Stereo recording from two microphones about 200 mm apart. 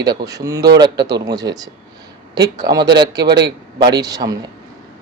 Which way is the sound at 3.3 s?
55° right (ahead or behind).